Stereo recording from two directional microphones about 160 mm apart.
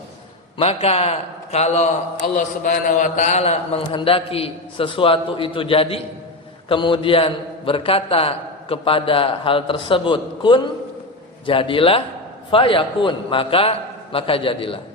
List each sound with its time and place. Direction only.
0.6 s a man's voice: 40° left (ahead or behind)